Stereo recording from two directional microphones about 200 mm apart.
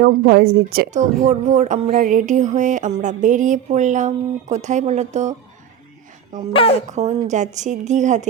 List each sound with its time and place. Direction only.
0.0 s a woman's voice: 50° right (ahead or behind); by 5.3 s 35° right (ahead or behind)
6.5 s a woman's voice: 25° left (ahead or behind)
6.9 s speech: 35° right (ahead or behind)